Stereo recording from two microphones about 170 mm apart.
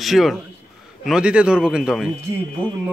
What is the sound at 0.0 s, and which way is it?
A man's voice, centre (ahead or behind).